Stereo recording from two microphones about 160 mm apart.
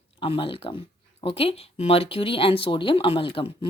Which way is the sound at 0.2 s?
35° left (ahead or behind).